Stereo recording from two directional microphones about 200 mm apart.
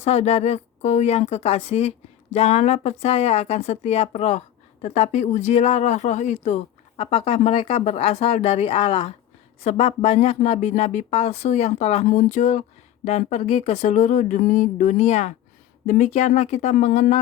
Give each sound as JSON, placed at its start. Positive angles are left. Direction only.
{"t": 0.0, "sound": "speech", "side_deg": 35}